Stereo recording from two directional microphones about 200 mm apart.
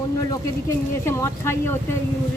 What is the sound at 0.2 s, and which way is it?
Speech, 15° left (ahead or behind).